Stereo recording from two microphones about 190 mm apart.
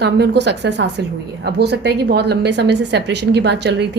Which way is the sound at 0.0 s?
60° right (ahead or behind).